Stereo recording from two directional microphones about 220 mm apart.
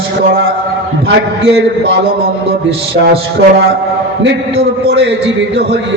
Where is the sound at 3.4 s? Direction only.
55° right (ahead or behind).